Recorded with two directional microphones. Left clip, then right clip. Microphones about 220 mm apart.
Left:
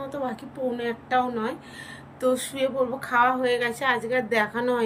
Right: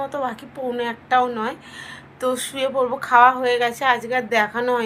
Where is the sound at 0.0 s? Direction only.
10° left (ahead or behind).